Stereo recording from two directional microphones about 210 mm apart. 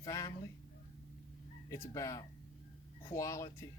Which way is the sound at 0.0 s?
15° left (ahead or behind).